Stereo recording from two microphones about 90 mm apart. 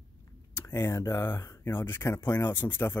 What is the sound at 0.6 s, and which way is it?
Speech, 30° left (ahead or behind).